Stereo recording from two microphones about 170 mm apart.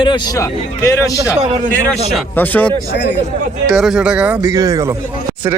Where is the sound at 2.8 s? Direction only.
90° left.